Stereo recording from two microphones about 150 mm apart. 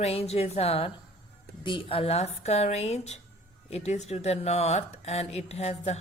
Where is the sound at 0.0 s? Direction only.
45° left (ahead or behind).